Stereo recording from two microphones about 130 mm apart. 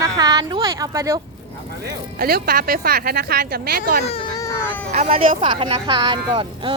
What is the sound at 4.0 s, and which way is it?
Speech, 50° left (ahead or behind).